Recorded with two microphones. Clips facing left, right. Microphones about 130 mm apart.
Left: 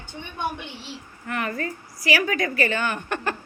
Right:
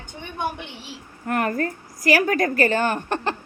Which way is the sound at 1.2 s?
50° right (ahead or behind).